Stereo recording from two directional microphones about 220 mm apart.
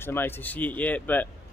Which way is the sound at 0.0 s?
10° left (ahead or behind).